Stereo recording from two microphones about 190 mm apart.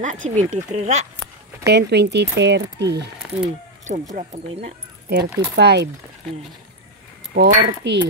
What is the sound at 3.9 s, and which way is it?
Speech, 40° right (ahead or behind).